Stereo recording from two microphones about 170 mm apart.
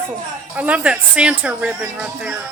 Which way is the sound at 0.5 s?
10° right (ahead or behind).